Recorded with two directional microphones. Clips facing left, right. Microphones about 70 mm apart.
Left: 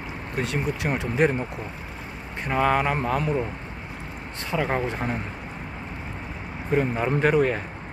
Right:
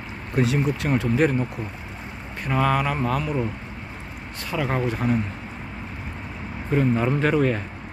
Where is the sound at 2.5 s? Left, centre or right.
Centre.